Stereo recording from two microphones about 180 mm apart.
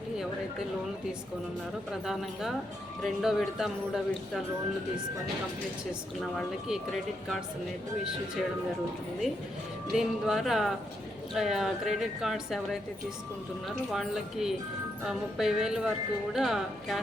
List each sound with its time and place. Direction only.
1.9 s speech: centre (ahead or behind)
6.3 s speech: centre (ahead or behind)
9.9 s speech: centre (ahead or behind)
13.9 s speech: centre (ahead or behind)